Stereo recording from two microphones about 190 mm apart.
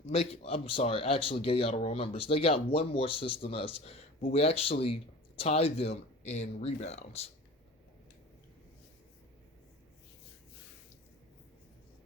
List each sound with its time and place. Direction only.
0.1 s speech: 30° left (ahead or behind)